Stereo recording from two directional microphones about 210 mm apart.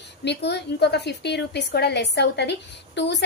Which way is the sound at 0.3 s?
55° left (ahead or behind).